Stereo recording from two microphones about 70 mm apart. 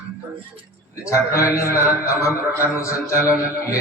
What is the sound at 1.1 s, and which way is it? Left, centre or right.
A man's voice, left.